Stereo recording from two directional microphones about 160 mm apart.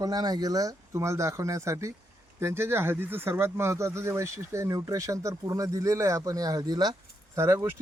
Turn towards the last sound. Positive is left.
turn(degrees=-15)  # may be behind; listen again after turning